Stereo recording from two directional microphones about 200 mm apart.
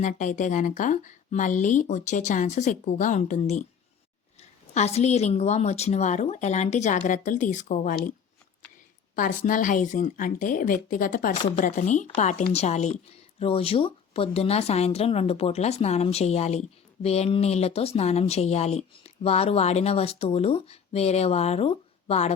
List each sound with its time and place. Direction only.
0.0 s speech: 40° left (ahead or behind)
9.1 s speech: 40° left (ahead or behind)